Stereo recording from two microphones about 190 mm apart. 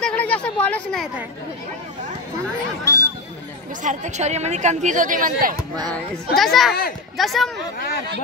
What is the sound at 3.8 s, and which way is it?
A woman's voice, 40° right (ahead or behind).